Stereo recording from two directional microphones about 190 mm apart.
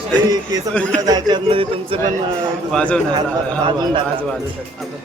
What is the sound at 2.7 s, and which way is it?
Speech, 5° left (ahead or behind).